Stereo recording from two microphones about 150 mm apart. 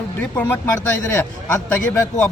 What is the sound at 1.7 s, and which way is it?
Speech, 15° left (ahead or behind).